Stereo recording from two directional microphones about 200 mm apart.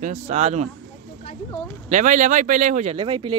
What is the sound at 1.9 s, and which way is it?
Speech, 40° right (ahead or behind).